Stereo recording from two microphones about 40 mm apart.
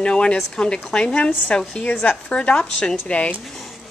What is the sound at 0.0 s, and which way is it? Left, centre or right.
A woman's voice, left.